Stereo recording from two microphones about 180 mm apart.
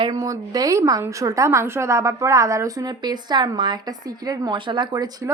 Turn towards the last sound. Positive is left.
turn(degrees=-20)  # may be behind; listen again after turning